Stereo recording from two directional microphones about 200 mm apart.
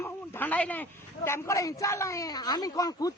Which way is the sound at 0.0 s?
10° left (ahead or behind).